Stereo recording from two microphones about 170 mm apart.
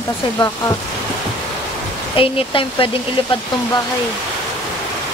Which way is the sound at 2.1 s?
30° left (ahead or behind).